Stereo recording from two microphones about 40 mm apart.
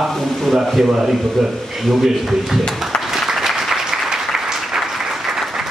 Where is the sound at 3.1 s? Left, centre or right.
Centre.